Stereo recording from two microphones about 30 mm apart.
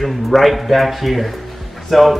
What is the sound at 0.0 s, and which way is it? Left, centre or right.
A man's voice, centre.